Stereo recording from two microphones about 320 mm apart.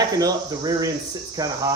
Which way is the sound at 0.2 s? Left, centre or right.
Centre.